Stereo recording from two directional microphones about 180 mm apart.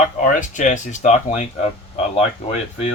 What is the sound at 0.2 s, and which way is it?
Speech, 45° left (ahead or behind).